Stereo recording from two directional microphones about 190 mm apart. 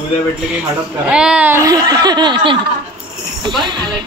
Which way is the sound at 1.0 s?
5° right (ahead or behind).